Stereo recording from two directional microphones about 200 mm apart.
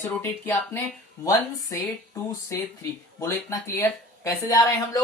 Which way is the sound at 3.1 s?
15° left (ahead or behind).